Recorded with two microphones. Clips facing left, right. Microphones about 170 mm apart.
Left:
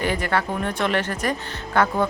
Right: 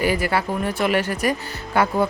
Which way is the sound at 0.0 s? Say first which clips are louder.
Right 2 dB; 5° right (ahead or behind).